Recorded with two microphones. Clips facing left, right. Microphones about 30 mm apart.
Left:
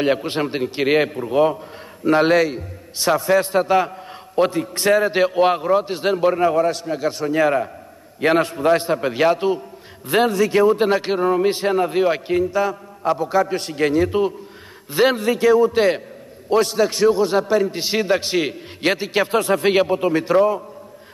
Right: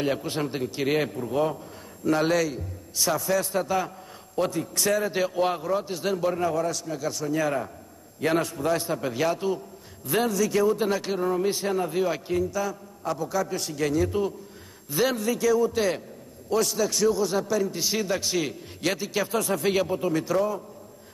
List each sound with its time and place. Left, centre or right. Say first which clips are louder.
0.0 s a man's voice: left 7 dB; left